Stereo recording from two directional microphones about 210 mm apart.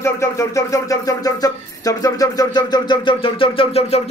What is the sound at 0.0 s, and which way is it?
Speech, 15° left (ahead or behind).